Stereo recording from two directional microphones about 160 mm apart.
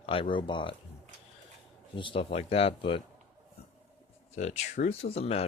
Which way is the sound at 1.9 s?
30° left (ahead or behind).